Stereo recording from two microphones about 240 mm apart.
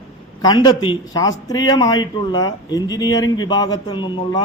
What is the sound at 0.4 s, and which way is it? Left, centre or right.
Speech, centre.